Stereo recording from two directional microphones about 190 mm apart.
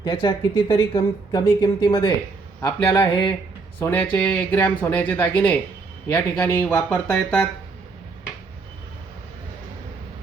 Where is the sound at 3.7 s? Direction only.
10° left (ahead or behind).